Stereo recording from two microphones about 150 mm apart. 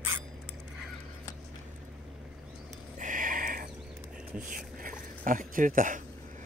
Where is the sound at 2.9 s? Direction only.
60° right (ahead or behind).